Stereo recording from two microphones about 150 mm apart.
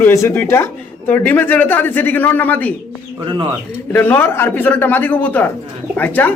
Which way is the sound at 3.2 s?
35° right (ahead or behind).